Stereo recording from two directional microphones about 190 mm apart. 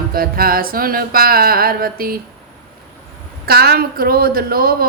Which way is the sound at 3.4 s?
55° right (ahead or behind).